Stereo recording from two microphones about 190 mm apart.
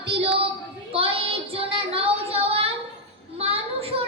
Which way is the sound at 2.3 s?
30° right (ahead or behind).